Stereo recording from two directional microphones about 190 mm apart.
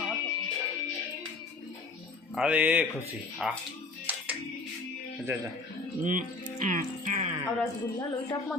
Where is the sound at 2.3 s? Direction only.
5° right (ahead or behind).